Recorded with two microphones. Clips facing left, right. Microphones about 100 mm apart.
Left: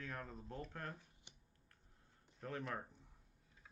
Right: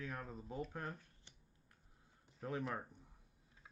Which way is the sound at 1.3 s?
15° left (ahead or behind).